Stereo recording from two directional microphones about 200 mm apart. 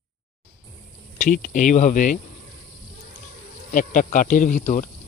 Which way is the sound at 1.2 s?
40° left (ahead or behind).